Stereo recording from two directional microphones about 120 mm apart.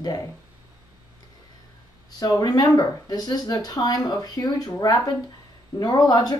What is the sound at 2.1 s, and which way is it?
Speech, 30° left (ahead or behind).